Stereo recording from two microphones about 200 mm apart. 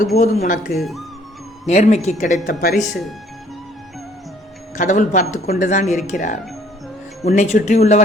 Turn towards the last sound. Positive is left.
turn(degrees=35)  # may be behind; listen again after turning